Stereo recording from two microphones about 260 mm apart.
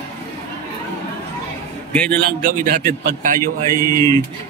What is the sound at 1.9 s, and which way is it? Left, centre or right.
Speech, centre.